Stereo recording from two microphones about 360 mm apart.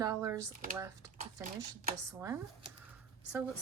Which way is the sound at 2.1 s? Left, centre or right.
Centre.